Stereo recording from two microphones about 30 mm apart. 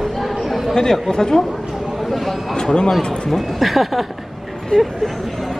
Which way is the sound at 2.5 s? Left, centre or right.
Left.